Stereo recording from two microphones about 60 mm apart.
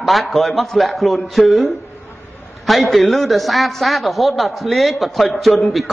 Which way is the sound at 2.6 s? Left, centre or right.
Centre.